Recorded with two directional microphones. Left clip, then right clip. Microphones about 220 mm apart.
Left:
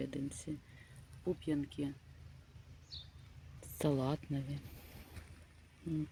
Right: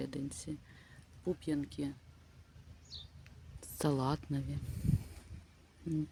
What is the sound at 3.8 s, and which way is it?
Speech, 5° right (ahead or behind).